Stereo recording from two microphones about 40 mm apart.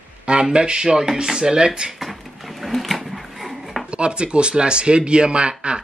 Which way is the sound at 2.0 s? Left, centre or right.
Centre.